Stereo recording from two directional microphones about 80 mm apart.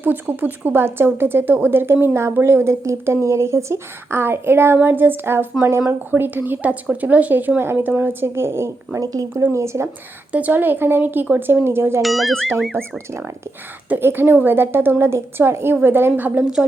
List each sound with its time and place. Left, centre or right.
0.0 s speech: right
9.0 s speech: right
10.3 s speech: right
12.0 s speech: centre
12.7 s speech: right